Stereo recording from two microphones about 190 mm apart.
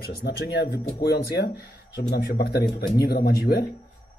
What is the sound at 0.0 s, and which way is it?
Speech, 55° left (ahead or behind).